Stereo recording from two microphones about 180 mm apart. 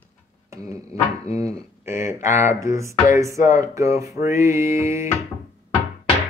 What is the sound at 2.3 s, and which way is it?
Speech, 15° right (ahead or behind).